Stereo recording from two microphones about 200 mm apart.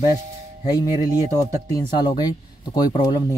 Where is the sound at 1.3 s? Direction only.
20° left (ahead or behind).